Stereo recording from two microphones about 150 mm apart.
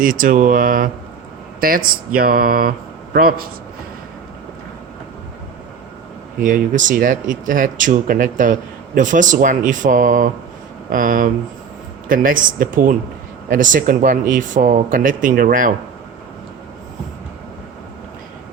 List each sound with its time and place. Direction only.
0.0 s speech: 65° right (ahead or behind); by 3.3 s 85° right
6.4 s speech: 60° right (ahead or behind)